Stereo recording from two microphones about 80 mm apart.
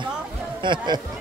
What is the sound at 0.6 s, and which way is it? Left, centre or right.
Speech, right.